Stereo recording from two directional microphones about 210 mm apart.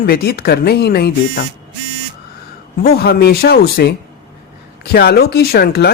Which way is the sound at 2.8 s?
50° left (ahead or behind).